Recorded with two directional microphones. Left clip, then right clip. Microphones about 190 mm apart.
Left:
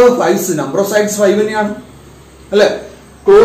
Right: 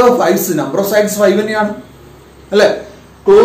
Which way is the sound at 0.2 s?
20° right (ahead or behind).